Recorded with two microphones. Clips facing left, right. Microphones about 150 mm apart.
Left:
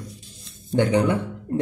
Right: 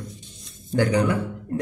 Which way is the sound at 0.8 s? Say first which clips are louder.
Left 1 dB; 25° left (ahead or behind).